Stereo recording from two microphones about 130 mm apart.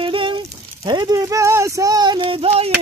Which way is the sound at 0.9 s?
25° right (ahead or behind).